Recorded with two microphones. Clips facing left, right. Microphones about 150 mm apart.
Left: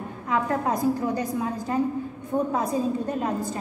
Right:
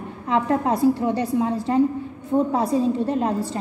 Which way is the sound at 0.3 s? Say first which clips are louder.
Right 4 dB; 25° right (ahead or behind).